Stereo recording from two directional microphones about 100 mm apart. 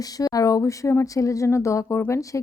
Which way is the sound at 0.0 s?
40° left (ahead or behind).